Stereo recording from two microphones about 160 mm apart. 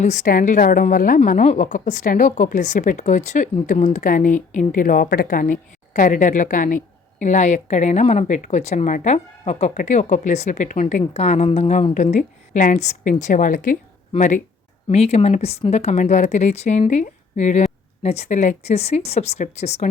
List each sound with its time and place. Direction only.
0.0 s a woman's voice: 50° left (ahead or behind)
11.0 s speech: 40° left (ahead or behind)
14.8 s speech: 40° left (ahead or behind)